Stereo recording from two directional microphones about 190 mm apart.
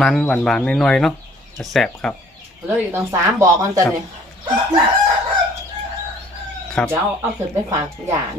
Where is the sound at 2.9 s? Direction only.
15° right (ahead or behind).